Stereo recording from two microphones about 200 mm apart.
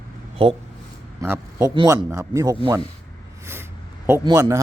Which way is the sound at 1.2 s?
15° right (ahead or behind).